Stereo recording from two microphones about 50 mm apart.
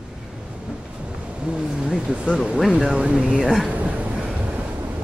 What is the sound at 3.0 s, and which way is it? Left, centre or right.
Speech, right.